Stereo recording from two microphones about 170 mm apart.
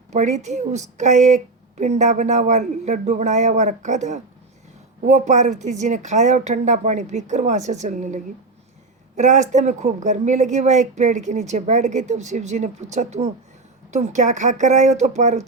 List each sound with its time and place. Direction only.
0.1 s speech: 45° right (ahead or behind)